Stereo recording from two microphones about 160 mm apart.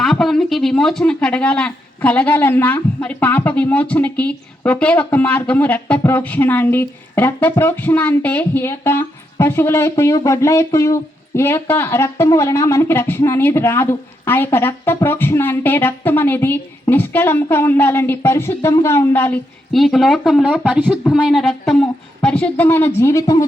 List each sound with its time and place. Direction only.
0.0 s speech: centre (ahead or behind); by 23.5 s 20° left (ahead or behind)